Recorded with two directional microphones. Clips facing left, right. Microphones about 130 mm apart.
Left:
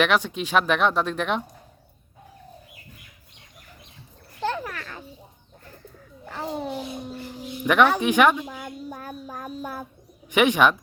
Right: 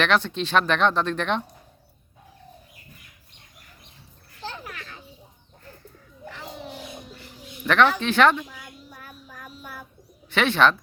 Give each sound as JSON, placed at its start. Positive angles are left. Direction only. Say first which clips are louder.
{"t": 0.0, "sound": "speech", "louder": "left 1 dB", "side_deg": 10}
{"t": 4.4, "sound": "a sound", "louder": "left 10 dB", "side_deg": 90}
{"t": 4.6, "sound": "children playing", "louder": "left 5 dB", "side_deg": 55}
{"t": 6.3, "sound": "a sound", "louder": "left 10 dB", "side_deg": 45}
{"t": 7.6, "sound": "speech", "louder": "left 1 dB", "side_deg": 10}
{"t": 8.4, "sound": "child singing", "louder": "left 9 dB", "side_deg": 50}
{"t": 10.3, "sound": "speech", "louder": "left 1 dB", "side_deg": 15}